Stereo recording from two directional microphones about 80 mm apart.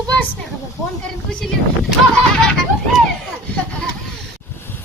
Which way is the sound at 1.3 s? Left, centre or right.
Centre.